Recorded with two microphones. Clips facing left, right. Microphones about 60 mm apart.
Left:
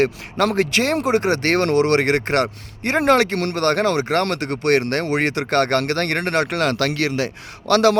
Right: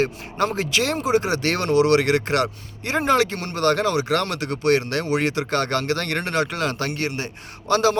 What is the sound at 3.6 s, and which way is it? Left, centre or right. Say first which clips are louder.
Speech: even; left.